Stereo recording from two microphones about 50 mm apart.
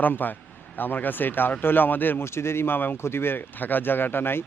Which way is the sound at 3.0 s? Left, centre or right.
Left.